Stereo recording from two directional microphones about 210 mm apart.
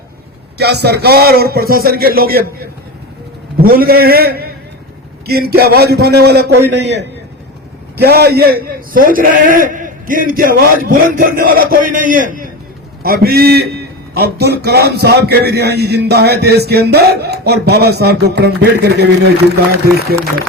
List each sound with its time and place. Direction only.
0.6 s a man's voice: 50° right (ahead or behind)